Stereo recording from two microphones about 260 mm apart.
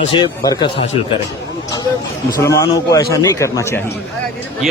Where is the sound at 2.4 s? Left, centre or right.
Centre.